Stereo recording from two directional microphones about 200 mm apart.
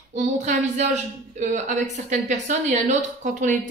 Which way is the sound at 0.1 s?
35° right (ahead or behind).